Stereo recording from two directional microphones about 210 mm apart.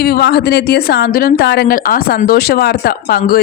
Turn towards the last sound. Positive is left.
turn(degrees=45)  # may be behind; listen again after turning